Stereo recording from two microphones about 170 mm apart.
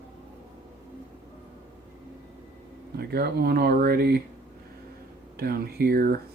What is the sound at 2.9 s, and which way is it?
Speech, 65° right (ahead or behind).